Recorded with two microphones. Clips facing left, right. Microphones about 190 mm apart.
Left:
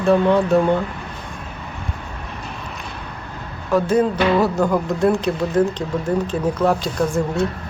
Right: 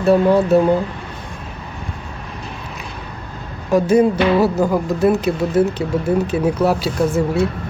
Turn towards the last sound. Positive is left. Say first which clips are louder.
# right 3 dB
turn(degrees=-5)  # may be behind; listen again after turning